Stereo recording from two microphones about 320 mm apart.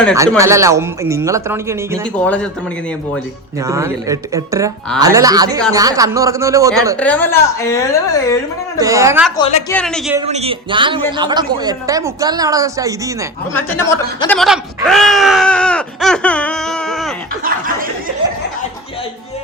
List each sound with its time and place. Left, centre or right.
0.3 s a woman's voice: centre
2.1 s speech: centre
3.7 s a woman's voice: centre
7.0 s a woman's voice: centre
8.8 s a woman's voice: centre
9.4 s a woman's voice: centre
9.7 s speech: centre
10.2 s a woman's voice: centre
13.5 s speech: centre